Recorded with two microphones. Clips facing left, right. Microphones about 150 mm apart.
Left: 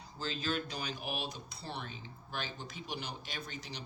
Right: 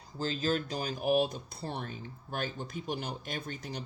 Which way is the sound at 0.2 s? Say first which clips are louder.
Right 5 dB; 40° right (ahead or behind).